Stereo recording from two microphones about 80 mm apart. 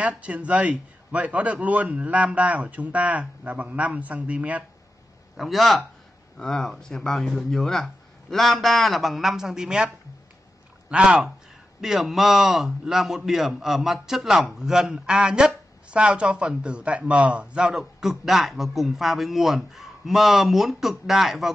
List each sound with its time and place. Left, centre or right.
0.0 s a man's voice: centre
5.4 s a man's voice: centre
10.9 s a man's voice: centre